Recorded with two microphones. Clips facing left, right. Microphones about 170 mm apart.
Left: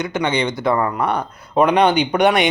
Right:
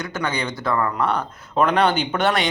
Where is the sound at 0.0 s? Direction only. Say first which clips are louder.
Left 6 dB; 20° left (ahead or behind).